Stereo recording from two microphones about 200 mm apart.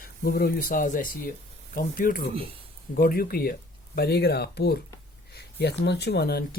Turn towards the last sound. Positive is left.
turn(degrees=55)  # may be behind; listen again after turning